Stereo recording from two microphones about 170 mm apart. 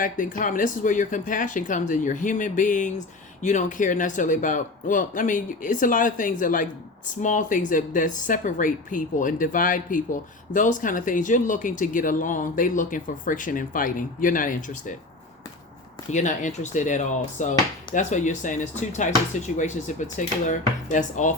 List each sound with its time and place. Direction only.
0.0 s speech: 50° left (ahead or behind)
16.1 s speech: 45° left (ahead or behind)